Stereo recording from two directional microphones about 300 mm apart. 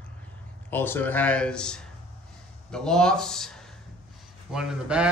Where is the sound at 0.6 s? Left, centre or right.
Centre.